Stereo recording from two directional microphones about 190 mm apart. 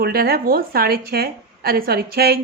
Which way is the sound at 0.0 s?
55° right (ahead or behind).